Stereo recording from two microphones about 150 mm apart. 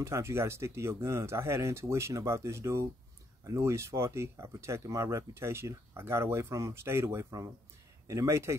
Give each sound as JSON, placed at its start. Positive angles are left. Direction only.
{"t": 0.0, "sound": "speech", "side_deg": -20}